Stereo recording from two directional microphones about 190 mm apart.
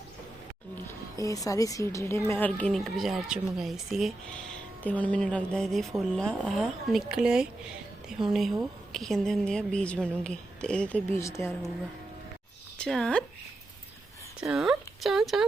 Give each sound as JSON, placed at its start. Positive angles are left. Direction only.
{"t": 1.1, "sound": "a woman's voice", "side_deg": 20}
{"t": 12.7, "sound": "speech", "side_deg": 5}
{"t": 14.5, "sound": "a woman's voice", "side_deg": -5}